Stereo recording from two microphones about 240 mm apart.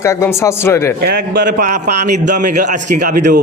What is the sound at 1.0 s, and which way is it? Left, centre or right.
Speech, right.